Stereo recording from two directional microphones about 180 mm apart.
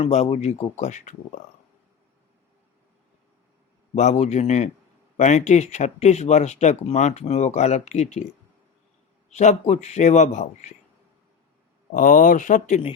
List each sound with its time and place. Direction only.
0.0 s speech: 35° left (ahead or behind)
3.9 s speech: 40° left (ahead or behind)
9.3 s speech: 40° left (ahead or behind)
11.9 s speech: 50° left (ahead or behind)